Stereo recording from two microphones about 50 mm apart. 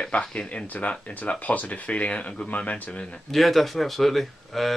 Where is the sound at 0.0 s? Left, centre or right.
Left.